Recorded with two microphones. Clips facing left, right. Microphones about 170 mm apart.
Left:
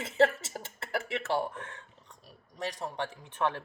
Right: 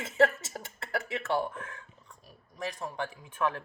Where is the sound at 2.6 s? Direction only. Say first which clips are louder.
Even; 35° left (ahead or behind).